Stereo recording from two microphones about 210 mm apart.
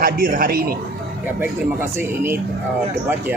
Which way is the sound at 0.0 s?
45° right (ahead or behind).